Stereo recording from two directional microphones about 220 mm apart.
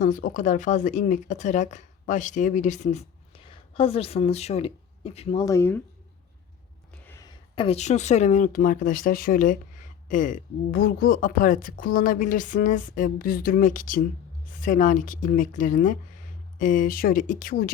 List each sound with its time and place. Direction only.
0.0 s speech: 40° left (ahead or behind); by 5.8 s 10° left (ahead or behind)
7.5 s speech: 25° left (ahead or behind); by 17.7 s 40° left (ahead or behind)